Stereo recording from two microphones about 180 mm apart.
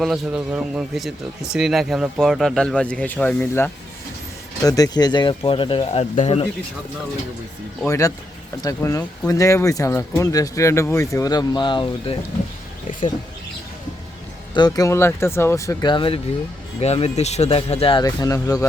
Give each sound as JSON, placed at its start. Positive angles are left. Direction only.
{"t": 0.0, "sound": "speech", "side_deg": -5}
{"t": 7.9, "sound": "speech", "side_deg": 15}
{"t": 14.5, "sound": "speech", "side_deg": 20}
{"t": 18.0, "sound": "speech", "side_deg": 20}